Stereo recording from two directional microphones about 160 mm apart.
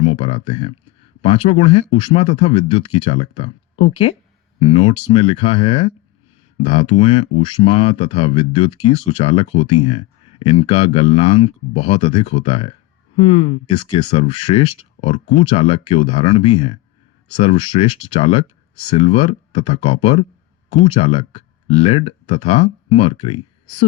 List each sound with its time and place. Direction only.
0.0 s speech: 35° left (ahead or behind)